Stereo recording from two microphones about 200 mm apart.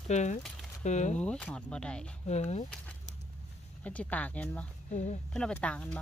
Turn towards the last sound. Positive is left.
turn(degrees=5)  # may be behind; listen again after turning